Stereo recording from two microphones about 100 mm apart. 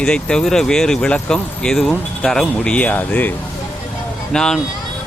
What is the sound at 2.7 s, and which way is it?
Speech, 15° left (ahead or behind).